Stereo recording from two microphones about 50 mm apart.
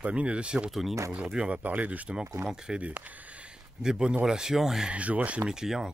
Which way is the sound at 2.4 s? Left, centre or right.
Right.